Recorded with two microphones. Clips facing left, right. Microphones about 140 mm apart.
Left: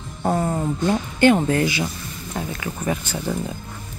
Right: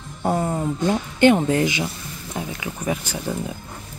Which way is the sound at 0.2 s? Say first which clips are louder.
Even; 10° right (ahead or behind).